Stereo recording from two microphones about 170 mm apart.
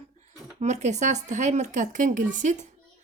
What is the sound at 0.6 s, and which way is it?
A woman's voice, 45° right (ahead or behind).